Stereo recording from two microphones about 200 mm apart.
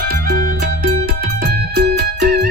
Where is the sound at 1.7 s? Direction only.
55° right (ahead or behind).